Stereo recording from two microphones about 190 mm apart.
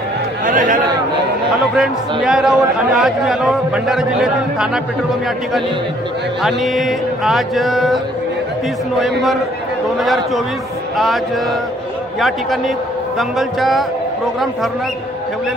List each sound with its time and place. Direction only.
0.5 s a sound: 45° right (ahead or behind)
1.8 s speech: centre (ahead or behind)
6.4 s speech: centre (ahead or behind)
9.9 s speech: centre (ahead or behind)
12.2 s speech: centre (ahead or behind)